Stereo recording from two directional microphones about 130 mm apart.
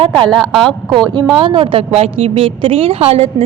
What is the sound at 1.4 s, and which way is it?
A woman's voice, 40° right (ahead or behind).